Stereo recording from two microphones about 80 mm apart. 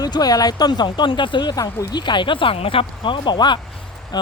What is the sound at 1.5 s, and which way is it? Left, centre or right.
Speech, left.